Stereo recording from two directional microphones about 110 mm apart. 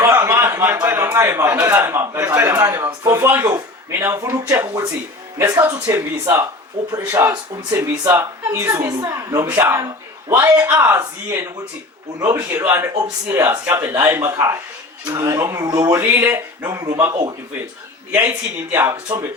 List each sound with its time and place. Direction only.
0.0 s a sound: 20° right (ahead or behind)
1.6 s a man's voice: 20° right (ahead or behind)
18.1 s speech: 10° right (ahead or behind)
18.7 s a man's voice: 25° right (ahead or behind)